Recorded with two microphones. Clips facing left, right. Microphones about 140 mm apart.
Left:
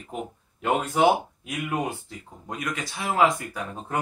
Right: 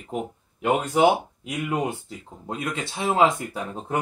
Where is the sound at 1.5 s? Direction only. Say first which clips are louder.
Right 3 dB; 20° right (ahead or behind).